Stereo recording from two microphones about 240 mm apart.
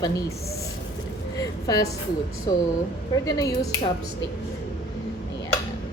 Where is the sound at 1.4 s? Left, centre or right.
Centre.